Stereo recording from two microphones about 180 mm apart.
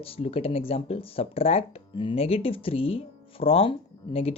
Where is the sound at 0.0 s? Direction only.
30° left (ahead or behind).